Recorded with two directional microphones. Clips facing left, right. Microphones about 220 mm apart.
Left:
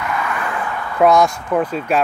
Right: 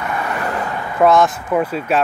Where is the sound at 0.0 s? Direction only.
35° right (ahead or behind).